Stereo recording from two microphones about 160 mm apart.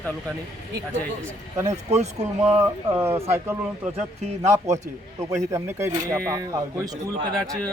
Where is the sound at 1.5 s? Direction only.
20° right (ahead or behind).